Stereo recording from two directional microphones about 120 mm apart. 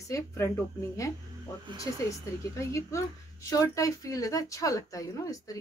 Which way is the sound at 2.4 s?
25° left (ahead or behind).